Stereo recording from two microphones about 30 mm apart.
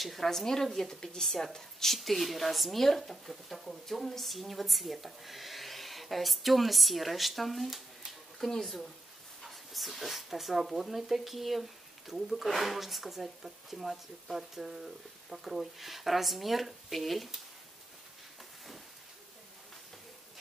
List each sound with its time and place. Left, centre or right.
0.0 s a woman's voice: centre
2.0 s speech: centre
8.5 s a woman's voice: left
9.5 s speech: centre